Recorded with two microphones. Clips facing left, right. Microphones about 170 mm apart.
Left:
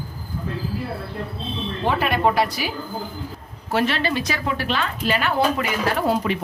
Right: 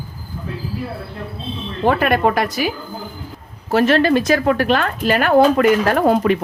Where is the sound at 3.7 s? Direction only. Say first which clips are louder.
Right 8 dB; 45° right (ahead or behind).